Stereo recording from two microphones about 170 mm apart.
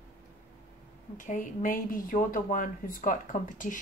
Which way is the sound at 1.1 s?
50° left (ahead or behind).